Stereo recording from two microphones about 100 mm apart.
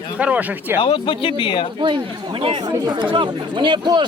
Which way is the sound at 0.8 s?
60° left (ahead or behind).